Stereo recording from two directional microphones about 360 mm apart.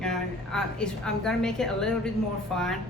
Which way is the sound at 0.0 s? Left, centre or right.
Centre.